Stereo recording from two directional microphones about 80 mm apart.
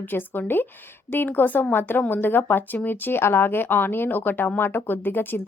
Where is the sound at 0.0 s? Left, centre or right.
Left.